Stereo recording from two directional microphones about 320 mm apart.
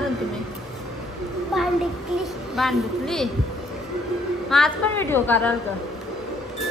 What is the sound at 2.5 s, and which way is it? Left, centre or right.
Speech, centre.